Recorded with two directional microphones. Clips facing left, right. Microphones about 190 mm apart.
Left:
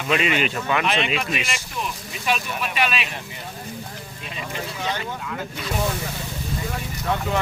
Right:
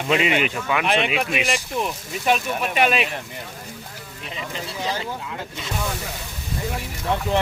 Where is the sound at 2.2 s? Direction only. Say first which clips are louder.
Right 4 dB; 50° right (ahead or behind).